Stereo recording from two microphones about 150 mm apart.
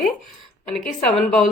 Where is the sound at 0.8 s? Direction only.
5° left (ahead or behind).